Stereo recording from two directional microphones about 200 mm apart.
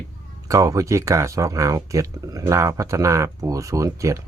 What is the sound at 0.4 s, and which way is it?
Speech, 15° right (ahead or behind).